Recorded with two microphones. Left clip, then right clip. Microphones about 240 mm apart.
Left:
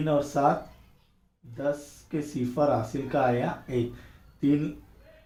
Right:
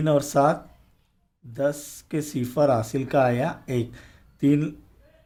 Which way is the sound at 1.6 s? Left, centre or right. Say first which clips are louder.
Right 4 dB; right.